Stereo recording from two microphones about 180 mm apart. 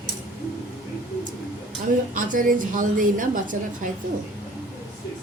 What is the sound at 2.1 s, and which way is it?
A woman's voice, 50° right (ahead or behind).